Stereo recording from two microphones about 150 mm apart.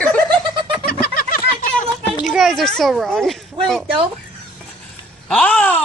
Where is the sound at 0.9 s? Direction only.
70° left (ahead or behind).